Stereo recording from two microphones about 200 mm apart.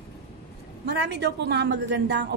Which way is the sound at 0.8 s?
60° right (ahead or behind).